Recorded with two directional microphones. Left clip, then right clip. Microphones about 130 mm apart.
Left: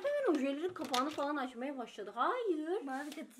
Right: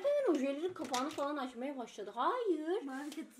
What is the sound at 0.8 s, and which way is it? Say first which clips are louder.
Speech: left 3 dB; 20° left (ahead or behind).